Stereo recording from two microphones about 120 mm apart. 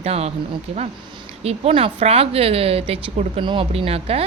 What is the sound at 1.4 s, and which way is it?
Speech, 55° right (ahead or behind).